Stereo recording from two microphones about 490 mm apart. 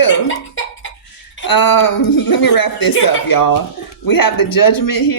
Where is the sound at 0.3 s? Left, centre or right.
Left.